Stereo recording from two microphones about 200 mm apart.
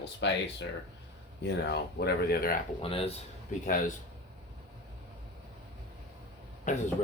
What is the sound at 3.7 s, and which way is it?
Speech, 40° left (ahead or behind).